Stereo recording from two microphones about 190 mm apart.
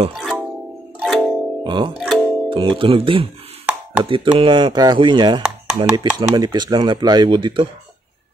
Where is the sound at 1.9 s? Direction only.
Centre (ahead or behind).